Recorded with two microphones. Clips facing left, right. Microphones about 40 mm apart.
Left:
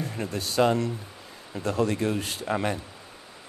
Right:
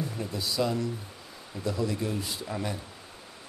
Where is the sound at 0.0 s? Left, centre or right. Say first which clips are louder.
Left 2 dB; left.